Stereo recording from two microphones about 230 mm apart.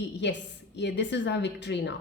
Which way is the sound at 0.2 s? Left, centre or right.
Left.